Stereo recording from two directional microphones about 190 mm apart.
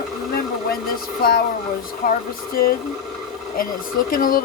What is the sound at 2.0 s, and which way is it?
Speech, 50° left (ahead or behind).